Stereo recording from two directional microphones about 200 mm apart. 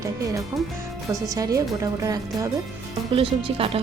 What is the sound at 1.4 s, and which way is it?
Speech, 15° right (ahead or behind).